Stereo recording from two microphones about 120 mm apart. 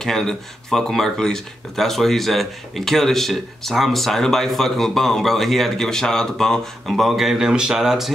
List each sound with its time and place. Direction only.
0.0 s speech: 5° left (ahead or behind)